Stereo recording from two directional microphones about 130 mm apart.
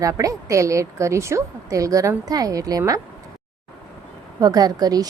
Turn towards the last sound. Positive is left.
turn(degrees=-30)  # may be behind; listen again after turning